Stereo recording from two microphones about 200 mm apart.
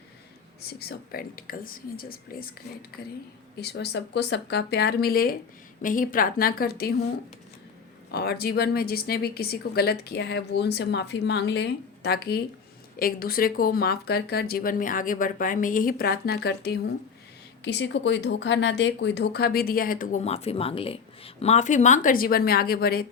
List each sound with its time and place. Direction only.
0.6 s speech: 50° left (ahead or behind)
3.6 s speech: 55° left (ahead or behind)
8.1 s speech: 50° left (ahead or behind)